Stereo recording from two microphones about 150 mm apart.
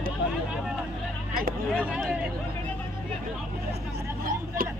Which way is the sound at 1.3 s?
80° right.